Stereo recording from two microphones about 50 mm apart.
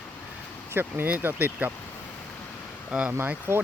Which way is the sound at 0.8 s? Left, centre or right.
Right.